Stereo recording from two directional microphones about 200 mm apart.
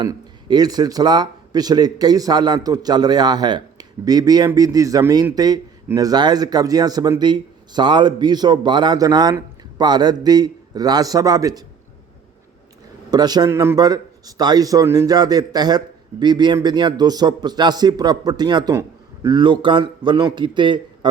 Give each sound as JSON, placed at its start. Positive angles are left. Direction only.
{"t": 0.0, "sound": "speech", "side_deg": -20}
{"t": 13.1, "sound": "speech", "side_deg": -20}